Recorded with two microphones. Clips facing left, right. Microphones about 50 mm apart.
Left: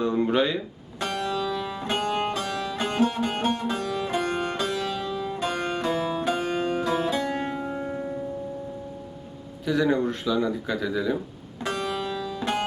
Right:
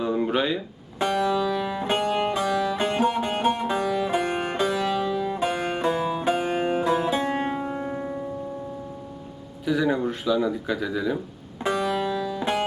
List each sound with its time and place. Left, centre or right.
0.0 s a sound: centre
0.9 s music: centre
9.6 s speech: centre
11.6 s music: centre